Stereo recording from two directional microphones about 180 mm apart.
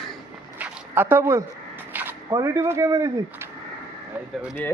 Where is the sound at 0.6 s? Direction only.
10° right (ahead or behind).